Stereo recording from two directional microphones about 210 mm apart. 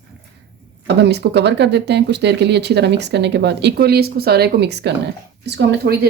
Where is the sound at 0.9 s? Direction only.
50° right (ahead or behind).